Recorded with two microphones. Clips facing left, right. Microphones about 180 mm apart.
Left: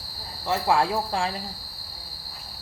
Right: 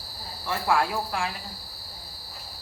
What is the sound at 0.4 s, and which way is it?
Speech, 25° left (ahead or behind).